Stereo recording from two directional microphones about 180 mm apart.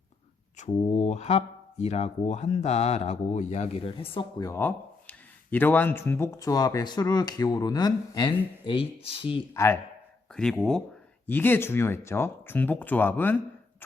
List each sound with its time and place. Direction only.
0.6 s speech: 40° left (ahead or behind)
10.3 s speech: 5° left (ahead or behind)